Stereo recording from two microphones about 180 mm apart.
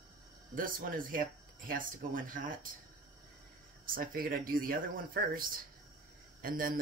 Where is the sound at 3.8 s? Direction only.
55° right (ahead or behind).